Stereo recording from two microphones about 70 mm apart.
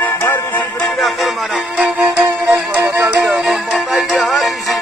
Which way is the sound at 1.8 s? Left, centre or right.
Centre.